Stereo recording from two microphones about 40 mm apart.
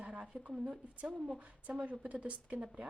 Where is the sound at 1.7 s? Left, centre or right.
Right.